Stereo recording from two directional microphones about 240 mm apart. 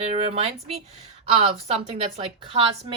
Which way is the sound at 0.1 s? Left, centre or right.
Right.